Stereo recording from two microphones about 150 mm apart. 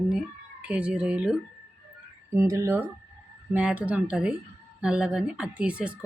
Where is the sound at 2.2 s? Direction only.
20° right (ahead or behind).